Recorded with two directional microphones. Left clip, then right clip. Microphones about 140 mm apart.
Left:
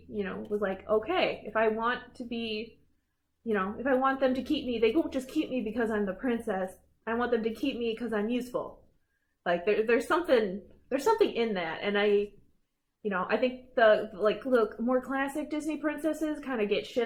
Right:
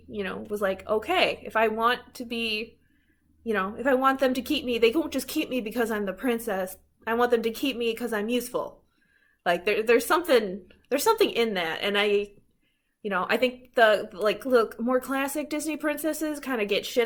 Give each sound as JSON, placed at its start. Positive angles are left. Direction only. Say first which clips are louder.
{"t": 0.1, "sound": "a woman's voice", "louder": "right 2 dB", "side_deg": -25}